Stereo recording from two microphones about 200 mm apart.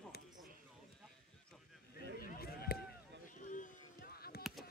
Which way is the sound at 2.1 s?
50° left (ahead or behind).